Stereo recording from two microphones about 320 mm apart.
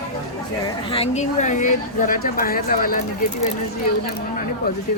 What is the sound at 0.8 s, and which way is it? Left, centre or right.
Speech, centre.